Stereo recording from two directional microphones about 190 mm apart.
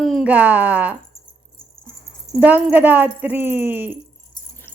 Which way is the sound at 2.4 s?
10° right (ahead or behind).